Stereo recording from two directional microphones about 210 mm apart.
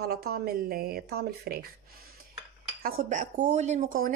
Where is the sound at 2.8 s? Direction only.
40° right (ahead or behind).